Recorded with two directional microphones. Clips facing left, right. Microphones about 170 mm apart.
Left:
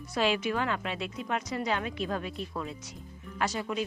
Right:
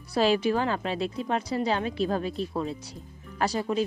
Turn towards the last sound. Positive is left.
turn(degrees=-35)  # may be behind; listen again after turning